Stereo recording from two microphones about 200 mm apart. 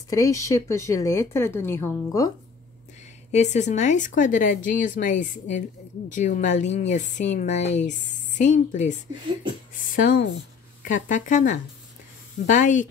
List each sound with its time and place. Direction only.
0.1 s speech: 15° left (ahead or behind)
3.3 s speech: 35° left (ahead or behind)